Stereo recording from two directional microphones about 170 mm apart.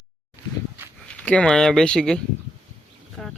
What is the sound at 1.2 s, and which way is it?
Speech, 5° left (ahead or behind).